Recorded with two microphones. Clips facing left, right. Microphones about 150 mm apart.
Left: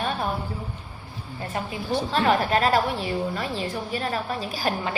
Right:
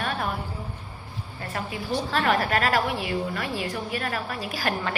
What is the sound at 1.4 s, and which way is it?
A woman's voice, 25° left (ahead or behind).